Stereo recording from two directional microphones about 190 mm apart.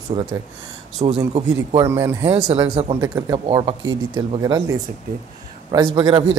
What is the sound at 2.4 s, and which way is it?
Speech, 35° right (ahead or behind).